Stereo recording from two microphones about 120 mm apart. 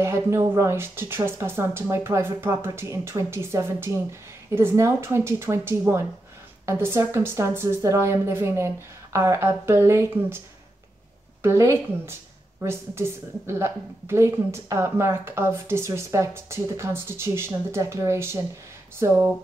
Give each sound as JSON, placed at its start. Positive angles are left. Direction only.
{"t": 0.0, "sound": "a woman's voice", "side_deg": -20}
{"t": 11.4, "sound": "a woman's voice", "side_deg": -25}